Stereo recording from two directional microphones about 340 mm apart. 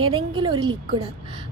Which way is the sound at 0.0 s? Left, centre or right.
Right.